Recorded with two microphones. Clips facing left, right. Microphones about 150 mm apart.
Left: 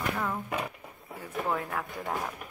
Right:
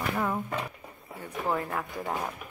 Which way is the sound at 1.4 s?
Centre (ahead or behind).